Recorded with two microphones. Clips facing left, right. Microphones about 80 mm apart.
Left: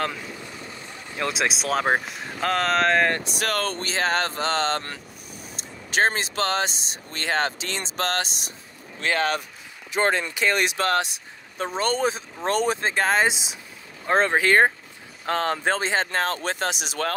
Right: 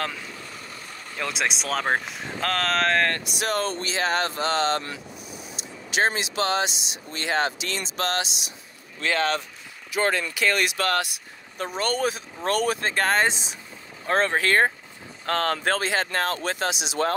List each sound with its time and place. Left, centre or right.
1.2 s speech: centre
3.3 s speech: left
9.8 s speech: left
12.9 s speech: centre
14.0 s speech: left